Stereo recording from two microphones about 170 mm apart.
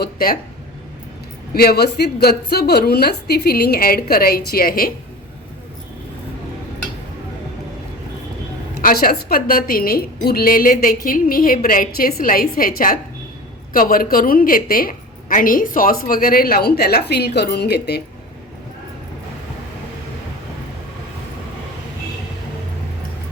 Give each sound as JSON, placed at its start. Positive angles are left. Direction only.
{"t": 0.0, "sound": "speech", "side_deg": 60}
{"t": 1.5, "sound": "a woman's voice", "side_deg": 70}
{"t": 8.8, "sound": "a woman's voice", "side_deg": 60}